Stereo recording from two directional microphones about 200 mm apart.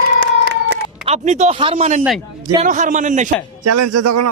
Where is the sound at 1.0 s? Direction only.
35° right (ahead or behind).